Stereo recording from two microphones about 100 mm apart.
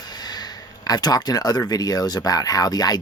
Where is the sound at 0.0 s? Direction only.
40° left (ahead or behind).